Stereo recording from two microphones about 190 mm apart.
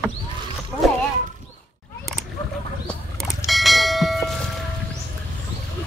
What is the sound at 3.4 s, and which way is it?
Fire alarm, centre (ahead or behind).